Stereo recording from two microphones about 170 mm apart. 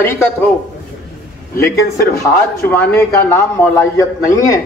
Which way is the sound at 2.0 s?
15° left (ahead or behind).